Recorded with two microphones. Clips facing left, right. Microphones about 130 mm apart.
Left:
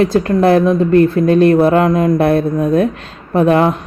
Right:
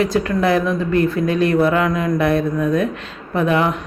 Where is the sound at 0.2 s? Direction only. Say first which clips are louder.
Left 6 dB; 45° left (ahead or behind).